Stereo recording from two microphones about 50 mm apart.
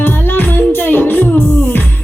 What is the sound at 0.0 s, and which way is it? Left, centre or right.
Music, left.